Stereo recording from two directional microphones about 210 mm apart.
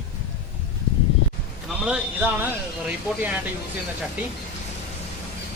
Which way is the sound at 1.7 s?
5° right (ahead or behind).